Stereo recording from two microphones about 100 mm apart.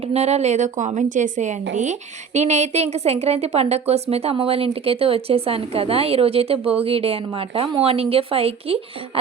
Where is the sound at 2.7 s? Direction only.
90° right.